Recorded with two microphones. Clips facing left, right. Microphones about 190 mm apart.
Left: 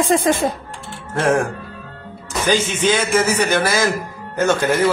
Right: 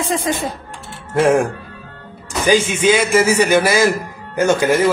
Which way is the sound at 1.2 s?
10° right (ahead or behind).